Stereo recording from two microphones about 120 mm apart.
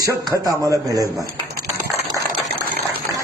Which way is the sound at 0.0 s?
30° right (ahead or behind).